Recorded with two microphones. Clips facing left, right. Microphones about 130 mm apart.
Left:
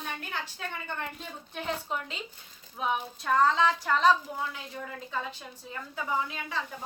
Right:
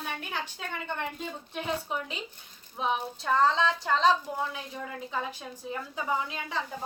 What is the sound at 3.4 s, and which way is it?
Speech, 25° right (ahead or behind).